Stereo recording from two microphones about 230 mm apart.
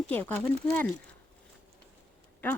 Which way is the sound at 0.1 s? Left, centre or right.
Centre.